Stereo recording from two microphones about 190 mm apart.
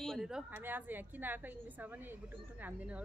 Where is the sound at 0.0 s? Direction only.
Centre (ahead or behind).